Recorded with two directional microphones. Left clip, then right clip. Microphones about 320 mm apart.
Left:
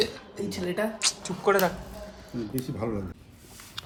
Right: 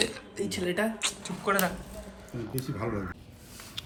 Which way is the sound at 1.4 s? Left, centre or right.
Centre.